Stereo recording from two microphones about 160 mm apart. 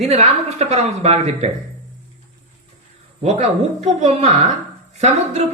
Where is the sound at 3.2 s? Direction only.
45° right (ahead or behind).